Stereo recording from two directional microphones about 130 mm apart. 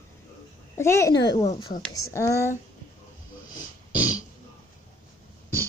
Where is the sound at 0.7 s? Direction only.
20° left (ahead or behind).